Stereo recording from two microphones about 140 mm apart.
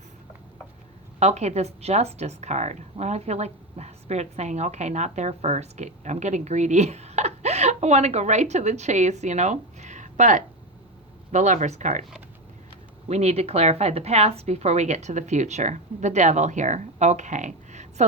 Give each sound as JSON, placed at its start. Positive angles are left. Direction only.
{"t": 1.2, "sound": "a woman's voice", "side_deg": -50}
{"t": 13.1, "sound": "a woman's voice", "side_deg": -50}